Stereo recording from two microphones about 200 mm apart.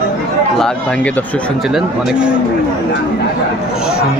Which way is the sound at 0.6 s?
5° left (ahead or behind).